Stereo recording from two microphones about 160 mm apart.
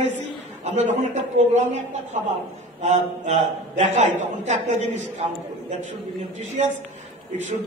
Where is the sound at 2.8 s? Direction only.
50° right (ahead or behind).